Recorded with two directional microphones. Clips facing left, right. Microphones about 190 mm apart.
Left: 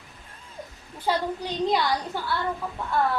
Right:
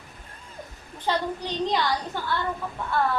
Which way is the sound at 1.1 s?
10° left (ahead or behind).